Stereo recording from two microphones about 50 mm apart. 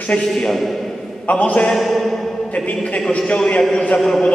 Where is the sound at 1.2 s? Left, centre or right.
Left.